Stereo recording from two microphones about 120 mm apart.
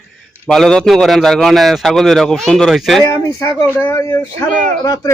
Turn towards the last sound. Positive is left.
turn(degrees=30)  # may be behind; listen again after turning